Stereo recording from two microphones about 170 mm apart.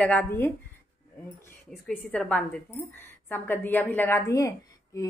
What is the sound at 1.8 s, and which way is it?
A woman's voice, 5° left (ahead or behind).